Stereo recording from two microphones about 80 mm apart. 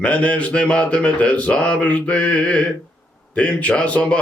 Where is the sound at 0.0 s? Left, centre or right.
Centre.